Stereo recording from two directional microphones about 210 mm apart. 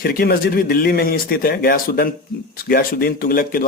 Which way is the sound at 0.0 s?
45° left (ahead or behind).